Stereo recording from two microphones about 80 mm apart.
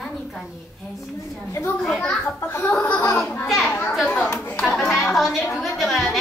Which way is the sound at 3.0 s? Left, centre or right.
Left.